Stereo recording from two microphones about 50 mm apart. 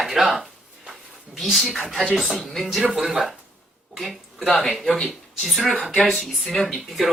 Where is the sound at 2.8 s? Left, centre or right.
Centre.